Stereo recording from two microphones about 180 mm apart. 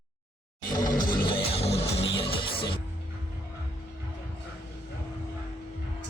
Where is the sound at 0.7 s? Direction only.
25° left (ahead or behind).